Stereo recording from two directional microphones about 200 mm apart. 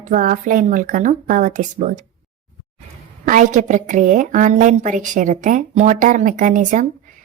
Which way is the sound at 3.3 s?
40° right (ahead or behind).